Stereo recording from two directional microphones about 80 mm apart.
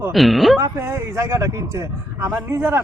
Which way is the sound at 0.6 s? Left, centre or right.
Right.